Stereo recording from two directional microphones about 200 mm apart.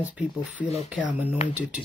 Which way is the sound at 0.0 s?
5° right (ahead or behind).